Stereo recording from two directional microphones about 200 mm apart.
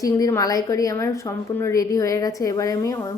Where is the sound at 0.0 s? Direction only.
15° left (ahead or behind).